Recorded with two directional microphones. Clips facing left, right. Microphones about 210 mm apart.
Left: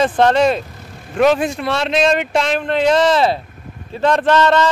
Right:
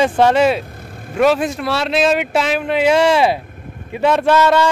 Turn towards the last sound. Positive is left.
turn(degrees=-10)  # may be behind; listen again after turning